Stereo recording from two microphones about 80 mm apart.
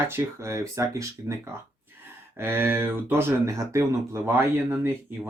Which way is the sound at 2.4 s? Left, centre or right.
Right.